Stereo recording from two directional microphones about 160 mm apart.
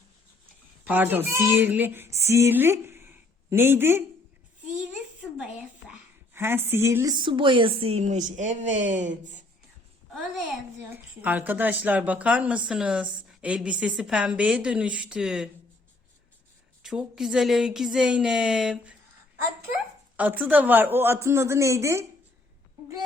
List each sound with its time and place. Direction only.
0.9 s speech: 10° right (ahead or behind)
5.2 s a sound: centre (ahead or behind)
6.3 s a woman's voice: 15° right (ahead or behind); by 9.4 s 50° right (ahead or behind)
10.9 s a woman's voice: 10° right (ahead or behind)
16.8 s a woman's voice: 5° right (ahead or behind); by 22.0 s 20° right (ahead or behind)